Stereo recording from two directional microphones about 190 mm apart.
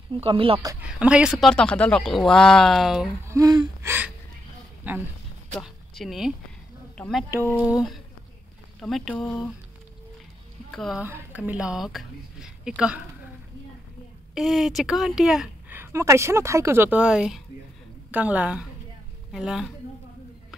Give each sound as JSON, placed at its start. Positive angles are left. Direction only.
{"t": 0.2, "sound": "speech", "side_deg": -30}
{"t": 0.7, "sound": "a woman's voice", "side_deg": -5}
{"t": 3.3, "sound": "gasp", "side_deg": -20}
{"t": 5.6, "sound": "a woman's voice", "side_deg": 0}
{"t": 8.8, "sound": "a woman's voice", "side_deg": 0}
{"t": 10.7, "sound": "a woman's voice", "side_deg": 0}
{"t": 14.3, "sound": "a woman's voice", "side_deg": 0}
{"t": 18.1, "sound": "gasp", "side_deg": -10}
{"t": 19.3, "sound": "a woman's voice", "side_deg": -5}